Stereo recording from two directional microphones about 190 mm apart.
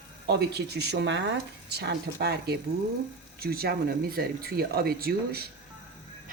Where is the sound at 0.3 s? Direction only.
60° right (ahead or behind).